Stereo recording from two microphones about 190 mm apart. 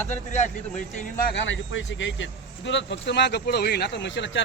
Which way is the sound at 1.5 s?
75° left (ahead or behind).